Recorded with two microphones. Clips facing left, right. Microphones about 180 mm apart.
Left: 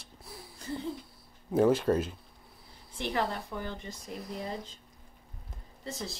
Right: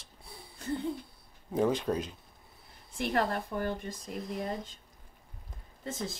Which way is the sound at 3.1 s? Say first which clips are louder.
Right 2 dB; 50° right (ahead or behind).